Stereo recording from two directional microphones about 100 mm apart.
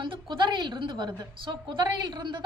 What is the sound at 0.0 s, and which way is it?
A woman's voice, 55° right (ahead or behind).